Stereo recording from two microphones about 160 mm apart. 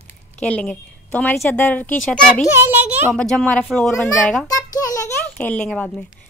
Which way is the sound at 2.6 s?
10° right (ahead or behind).